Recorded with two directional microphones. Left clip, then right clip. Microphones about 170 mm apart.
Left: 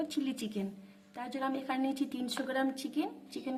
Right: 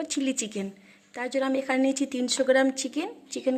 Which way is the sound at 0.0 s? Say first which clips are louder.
Right 7 dB; 25° right (ahead or behind).